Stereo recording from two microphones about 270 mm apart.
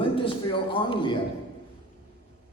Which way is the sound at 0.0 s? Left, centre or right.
Centre.